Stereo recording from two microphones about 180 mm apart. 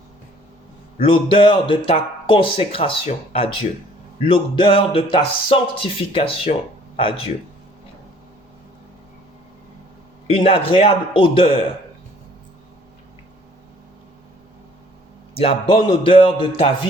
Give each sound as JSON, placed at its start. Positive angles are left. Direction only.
{"t": 0.9, "sound": "a man's voice", "side_deg": 30}
{"t": 10.2, "sound": "a man's voice", "side_deg": 30}
{"t": 15.4, "sound": "a man's voice", "side_deg": 30}